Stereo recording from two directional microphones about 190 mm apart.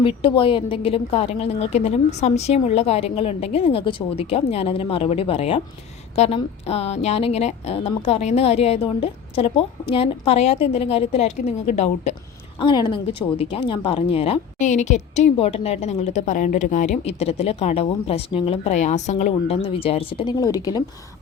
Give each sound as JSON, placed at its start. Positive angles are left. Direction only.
{"t": 0.0, "sound": "a woman's voice", "side_deg": 30}
{"t": 12.5, "sound": "a woman's voice", "side_deg": 25}